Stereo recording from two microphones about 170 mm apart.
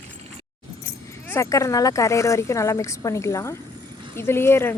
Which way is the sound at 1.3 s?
20° left (ahead or behind).